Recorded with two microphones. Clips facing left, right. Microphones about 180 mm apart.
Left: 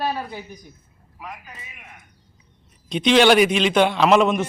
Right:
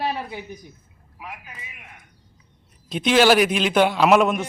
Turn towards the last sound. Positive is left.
turn(degrees=-5)  # may be behind; listen again after turning